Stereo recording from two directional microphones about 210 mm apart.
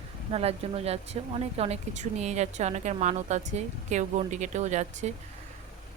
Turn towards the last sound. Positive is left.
turn(degrees=-35)  # may be behind; listen again after turning